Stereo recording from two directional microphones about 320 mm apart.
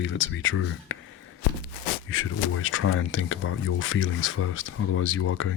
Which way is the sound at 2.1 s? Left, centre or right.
Left.